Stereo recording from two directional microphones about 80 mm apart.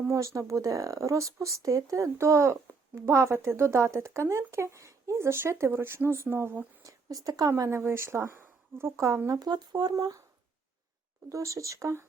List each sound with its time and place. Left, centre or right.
0.1 s speech: right
7.3 s speech: right
7.6 s speech: right
9.4 s speech: right
9.9 s speech: right
11.3 s speech: right